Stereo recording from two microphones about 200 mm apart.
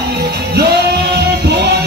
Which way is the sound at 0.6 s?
55° right (ahead or behind).